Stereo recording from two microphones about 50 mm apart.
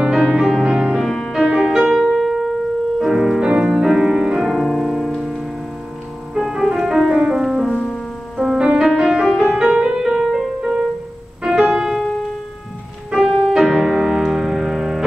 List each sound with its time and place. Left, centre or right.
0.2 s music: centre
1.0 s music: centre
1.3 s music: centre
2.1 s piano: centre
3.0 s music: centre
4.4 s music: centre
7.6 s music: left
8.5 s music: centre
13.1 s piano: centre